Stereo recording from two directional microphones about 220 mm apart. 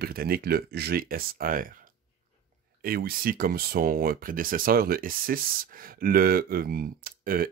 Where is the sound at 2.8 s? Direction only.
40° right (ahead or behind).